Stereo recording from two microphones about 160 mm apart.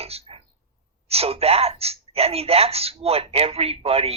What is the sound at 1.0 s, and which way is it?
Speech, 40° right (ahead or behind).